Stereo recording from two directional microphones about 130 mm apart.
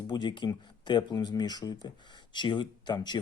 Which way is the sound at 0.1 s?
35° left (ahead or behind).